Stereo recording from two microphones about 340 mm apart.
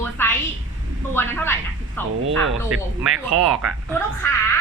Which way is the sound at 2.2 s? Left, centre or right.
Right.